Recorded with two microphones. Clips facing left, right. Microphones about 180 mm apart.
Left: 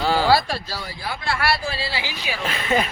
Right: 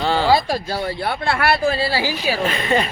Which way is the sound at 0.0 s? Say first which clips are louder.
Right 1 dB; 5° left (ahead or behind).